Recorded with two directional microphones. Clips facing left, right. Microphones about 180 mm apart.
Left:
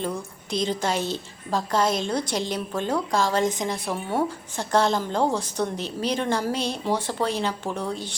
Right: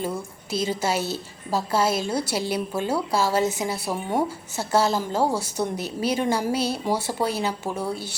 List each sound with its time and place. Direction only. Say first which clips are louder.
0.0 s a woman's voice: right 1 dB; 5° right (ahead or behind)